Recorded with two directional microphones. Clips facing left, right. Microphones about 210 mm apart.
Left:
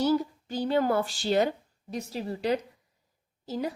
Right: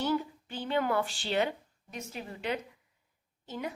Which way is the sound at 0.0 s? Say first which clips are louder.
Left 6 dB; 40° left (ahead or behind).